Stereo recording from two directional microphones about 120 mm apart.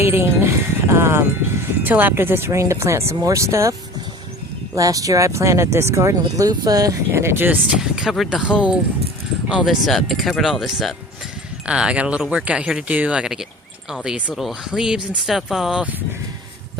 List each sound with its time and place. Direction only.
0.0 s speech: 20° right (ahead or behind)
7.8 s speech: 5° right (ahead or behind)